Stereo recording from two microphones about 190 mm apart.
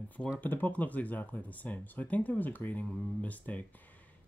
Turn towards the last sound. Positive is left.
turn(degrees=10)  # may be behind; listen again after turning